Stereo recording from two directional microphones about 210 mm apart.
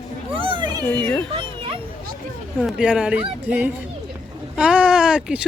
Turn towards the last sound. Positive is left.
turn(degrees=-5)  # may be behind; listen again after turning